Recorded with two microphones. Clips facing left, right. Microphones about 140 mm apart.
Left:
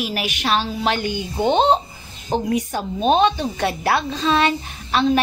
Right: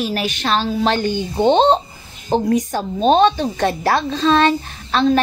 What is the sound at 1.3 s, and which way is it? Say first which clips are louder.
Speech: right 4 dB; 25° right (ahead or behind).